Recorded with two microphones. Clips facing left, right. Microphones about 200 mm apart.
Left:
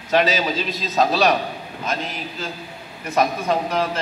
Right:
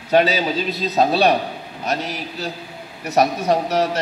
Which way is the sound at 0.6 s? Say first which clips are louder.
Right 2 dB; 35° right (ahead or behind).